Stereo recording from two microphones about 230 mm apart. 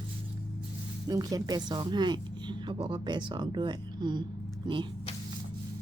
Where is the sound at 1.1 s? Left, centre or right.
Centre.